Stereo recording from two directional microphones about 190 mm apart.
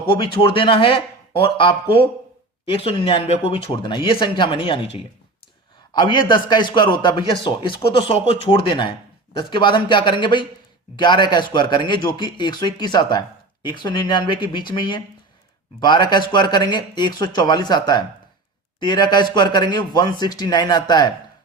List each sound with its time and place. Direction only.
0.1 s a man's voice: 25° left (ahead or behind)